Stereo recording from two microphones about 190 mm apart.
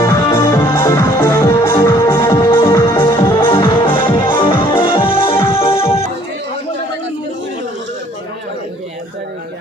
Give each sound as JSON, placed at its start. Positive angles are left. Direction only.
{"t": 0.0, "sound": "music", "side_deg": 15}
{"t": 5.4, "sound": "music", "side_deg": 15}